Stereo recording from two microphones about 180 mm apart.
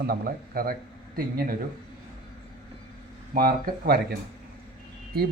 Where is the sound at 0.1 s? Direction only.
55° right (ahead or behind).